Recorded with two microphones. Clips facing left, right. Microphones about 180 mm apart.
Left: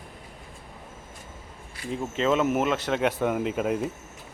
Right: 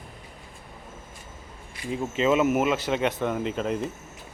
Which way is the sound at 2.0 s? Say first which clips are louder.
Right 2 dB; 5° right (ahead or behind).